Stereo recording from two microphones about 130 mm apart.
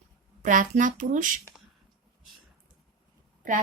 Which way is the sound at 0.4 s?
80° right.